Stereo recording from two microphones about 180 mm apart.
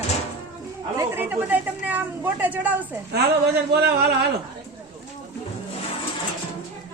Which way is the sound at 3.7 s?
65° right (ahead or behind).